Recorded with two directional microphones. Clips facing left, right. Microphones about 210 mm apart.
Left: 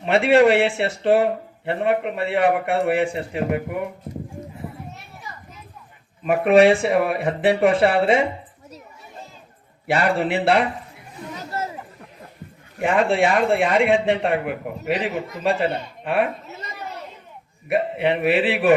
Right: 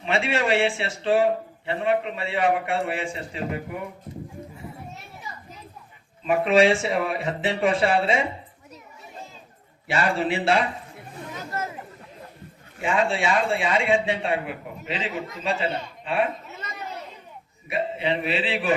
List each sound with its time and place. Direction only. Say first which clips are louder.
0.0 s speech: left 10 dB; 60° left (ahead or behind)
6.2 s speech: left 4 dB; 60° left (ahead or behind)
9.8 s speech: left 4 dB; 60° left (ahead or behind)
12.8 s speech: left 5 dB; 60° left (ahead or behind)
17.7 s speech: left 5 dB; 60° left (ahead or behind)